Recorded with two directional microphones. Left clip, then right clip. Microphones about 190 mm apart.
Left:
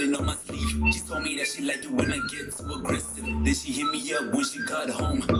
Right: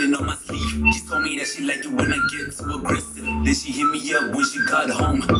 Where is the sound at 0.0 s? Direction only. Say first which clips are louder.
Right 5 dB; 20° left (ahead or behind).